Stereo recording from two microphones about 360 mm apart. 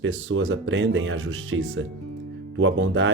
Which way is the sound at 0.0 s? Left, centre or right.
Right.